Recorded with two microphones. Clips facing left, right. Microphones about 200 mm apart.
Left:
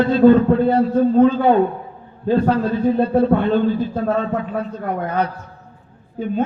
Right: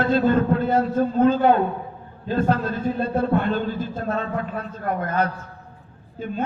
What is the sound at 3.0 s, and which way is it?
A man's voice, 60° left (ahead or behind).